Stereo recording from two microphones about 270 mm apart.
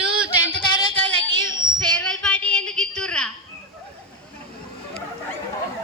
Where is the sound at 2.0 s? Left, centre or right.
Centre.